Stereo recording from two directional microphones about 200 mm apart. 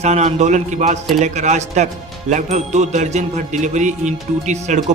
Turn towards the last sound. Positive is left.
turn(degrees=-35)  # may be behind; listen again after turning